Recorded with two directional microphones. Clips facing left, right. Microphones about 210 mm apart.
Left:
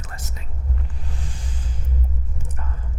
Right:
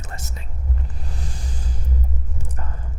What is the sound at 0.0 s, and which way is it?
Whispering, 25° right (ahead or behind).